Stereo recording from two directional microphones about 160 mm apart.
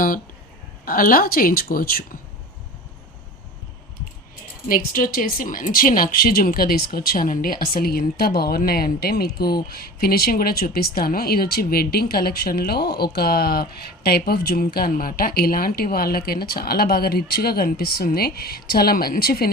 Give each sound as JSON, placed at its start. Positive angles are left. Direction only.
{"t": 0.9, "sound": "a woman's voice", "side_deg": 60}
{"t": 4.7, "sound": "a woman's voice", "side_deg": 65}